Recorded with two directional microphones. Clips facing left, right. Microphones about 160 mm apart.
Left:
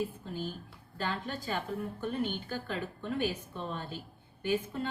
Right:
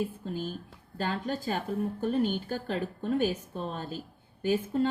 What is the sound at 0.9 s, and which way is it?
A woman's voice, 45° right (ahead or behind).